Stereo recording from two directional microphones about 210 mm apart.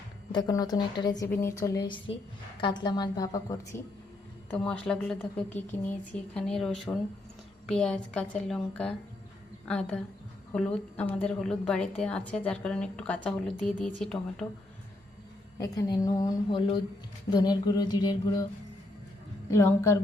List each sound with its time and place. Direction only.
0.3 s a woman's voice: 20° left (ahead or behind)
4.5 s a woman's voice: 5° left (ahead or behind)
15.5 s a woman's voice: 15° left (ahead or behind)
19.5 s a woman's voice: 15° left (ahead or behind)